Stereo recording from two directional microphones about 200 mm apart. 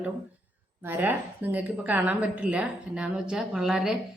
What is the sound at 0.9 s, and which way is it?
A woman's voice, 10° right (ahead or behind).